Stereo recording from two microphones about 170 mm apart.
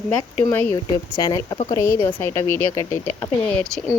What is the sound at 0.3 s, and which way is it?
Speech, 10° left (ahead or behind).